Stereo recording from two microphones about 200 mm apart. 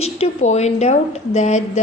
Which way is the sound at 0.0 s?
35° left (ahead or behind).